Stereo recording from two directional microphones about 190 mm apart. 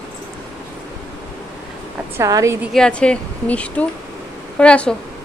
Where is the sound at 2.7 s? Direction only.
5° left (ahead or behind).